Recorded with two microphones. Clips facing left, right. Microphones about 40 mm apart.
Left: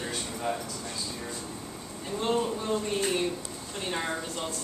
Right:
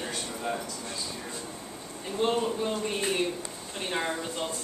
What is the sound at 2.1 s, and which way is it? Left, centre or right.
Speech, right.